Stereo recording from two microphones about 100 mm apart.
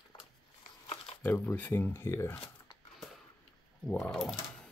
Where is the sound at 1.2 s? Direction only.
20° left (ahead or behind).